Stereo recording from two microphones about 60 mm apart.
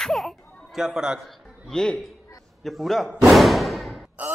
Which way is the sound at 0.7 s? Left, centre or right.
Centre.